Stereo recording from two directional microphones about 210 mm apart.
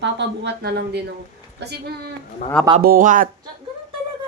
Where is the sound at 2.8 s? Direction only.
40° right (ahead or behind).